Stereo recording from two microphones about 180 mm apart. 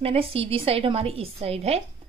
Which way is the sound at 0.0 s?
30° right (ahead or behind).